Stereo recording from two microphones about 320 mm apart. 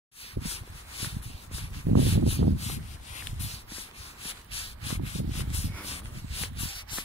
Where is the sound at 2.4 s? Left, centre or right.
Right.